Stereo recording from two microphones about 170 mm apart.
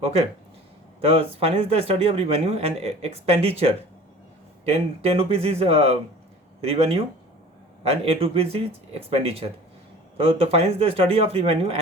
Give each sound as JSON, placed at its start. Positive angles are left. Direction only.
{"t": 0.0, "sound": "speech", "side_deg": -40}